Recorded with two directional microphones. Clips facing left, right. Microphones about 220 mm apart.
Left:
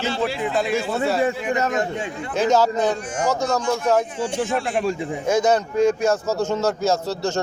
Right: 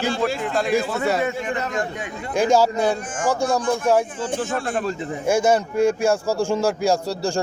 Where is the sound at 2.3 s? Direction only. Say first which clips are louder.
Right 1 dB; 10° right (ahead or behind).